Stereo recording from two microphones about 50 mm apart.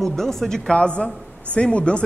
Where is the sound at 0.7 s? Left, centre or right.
Left.